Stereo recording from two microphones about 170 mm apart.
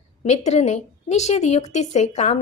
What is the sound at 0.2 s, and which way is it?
A woman's voice, 40° left (ahead or behind).